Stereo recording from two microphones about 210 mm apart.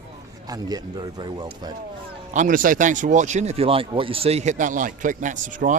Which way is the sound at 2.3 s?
40° right (ahead or behind).